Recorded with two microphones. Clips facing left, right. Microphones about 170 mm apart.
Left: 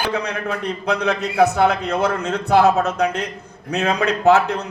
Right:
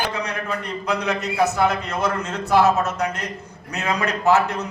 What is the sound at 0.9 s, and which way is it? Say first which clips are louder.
A man's voice: left 3 dB; 60° left (ahead or behind).